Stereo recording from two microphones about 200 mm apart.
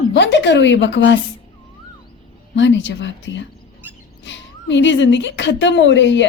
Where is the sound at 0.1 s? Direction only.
65° left (ahead or behind).